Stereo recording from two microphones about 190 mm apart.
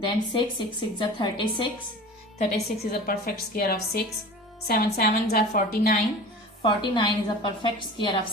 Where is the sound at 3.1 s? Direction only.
50° left (ahead or behind).